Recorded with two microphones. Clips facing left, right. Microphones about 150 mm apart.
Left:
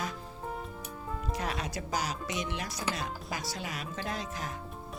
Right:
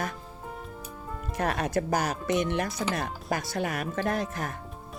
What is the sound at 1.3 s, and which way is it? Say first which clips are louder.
Speech: right 10 dB; 55° right (ahead or behind).